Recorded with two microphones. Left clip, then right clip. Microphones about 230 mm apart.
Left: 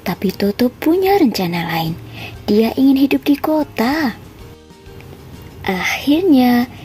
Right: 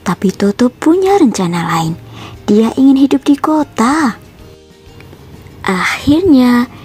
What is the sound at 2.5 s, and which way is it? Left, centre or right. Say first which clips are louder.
Speech: right 4 dB; centre.